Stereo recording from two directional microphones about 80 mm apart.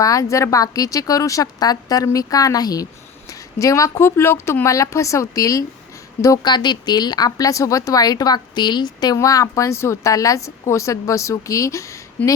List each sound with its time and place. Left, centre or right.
0.0 s a woman's voice: left
6.4 s speech: left
9.1 s speech: left